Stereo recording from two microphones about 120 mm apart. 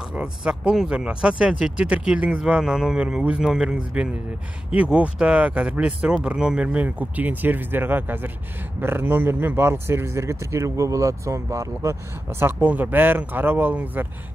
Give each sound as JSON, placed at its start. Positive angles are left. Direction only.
{"t": 0.1, "sound": "speech", "side_deg": -10}